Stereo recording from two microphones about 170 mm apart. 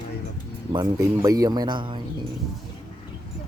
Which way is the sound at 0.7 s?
25° right (ahead or behind).